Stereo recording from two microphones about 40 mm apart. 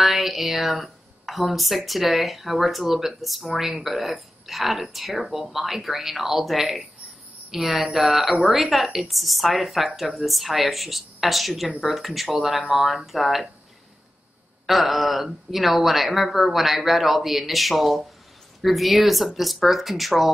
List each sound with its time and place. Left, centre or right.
0.0 s speech: centre
12.5 s speech: right
12.8 s speech: centre
14.7 s speech: centre